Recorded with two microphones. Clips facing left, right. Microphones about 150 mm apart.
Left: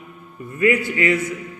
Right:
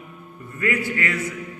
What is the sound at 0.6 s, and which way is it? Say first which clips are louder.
Mantra: left 6 dB; 20° left (ahead or behind).